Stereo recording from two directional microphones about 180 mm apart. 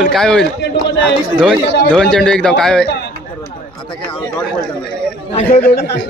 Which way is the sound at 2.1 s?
5° left (ahead or behind).